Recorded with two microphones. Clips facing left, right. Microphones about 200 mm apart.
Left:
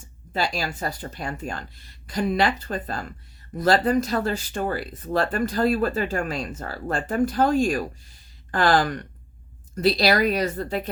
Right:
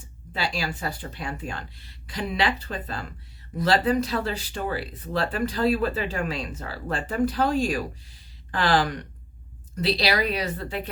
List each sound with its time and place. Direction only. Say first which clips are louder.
0.3 s speech: left 3 dB; 45° left (ahead or behind)